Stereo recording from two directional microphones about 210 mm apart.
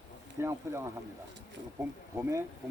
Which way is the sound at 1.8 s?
15° right (ahead or behind).